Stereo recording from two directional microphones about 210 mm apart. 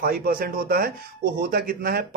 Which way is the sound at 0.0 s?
45° right (ahead or behind).